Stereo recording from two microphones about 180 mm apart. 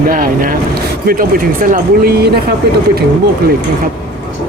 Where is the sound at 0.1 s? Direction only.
50° right (ahead or behind).